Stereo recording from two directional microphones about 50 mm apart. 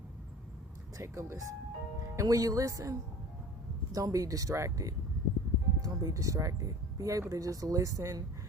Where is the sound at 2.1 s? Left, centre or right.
Right.